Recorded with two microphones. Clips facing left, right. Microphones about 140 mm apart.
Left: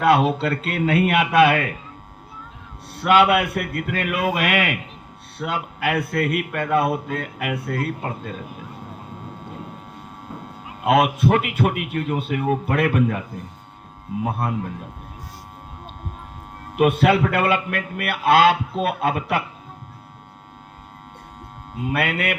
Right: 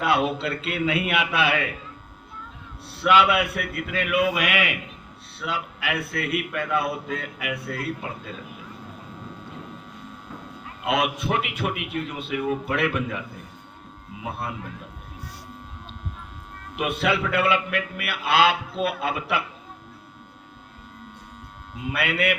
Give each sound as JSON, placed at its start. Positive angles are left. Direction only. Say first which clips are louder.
{"t": 0.0, "sound": "a man's voice", "louder": "left 5 dB", "side_deg": 45}
{"t": 2.9, "sound": "a man's voice", "louder": "left 3 dB", "side_deg": 45}
{"t": 10.8, "sound": "a man's voice", "louder": "left 7 dB", "side_deg": 45}
{"t": 14.3, "sound": "a man's voice", "louder": "left 5 dB", "side_deg": 50}
{"t": 16.7, "sound": "a man's voice", "louder": "left 8 dB", "side_deg": 45}
{"t": 21.8, "sound": "a man's voice", "louder": "left 1 dB", "side_deg": 45}